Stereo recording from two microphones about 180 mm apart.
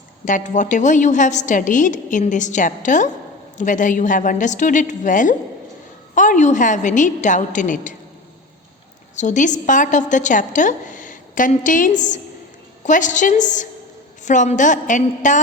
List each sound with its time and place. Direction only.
0.3 s a woman's voice: 45° left (ahead or behind)
9.1 s a woman's voice: 45° left (ahead or behind)